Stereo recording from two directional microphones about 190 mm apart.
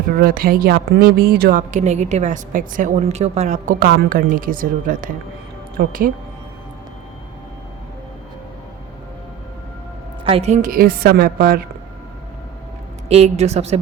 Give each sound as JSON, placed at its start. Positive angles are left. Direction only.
{"t": 0.1, "sound": "a woman's voice", "side_deg": -50}
{"t": 10.2, "sound": "a woman's voice", "side_deg": -30}
{"t": 13.1, "sound": "a woman's voice", "side_deg": -35}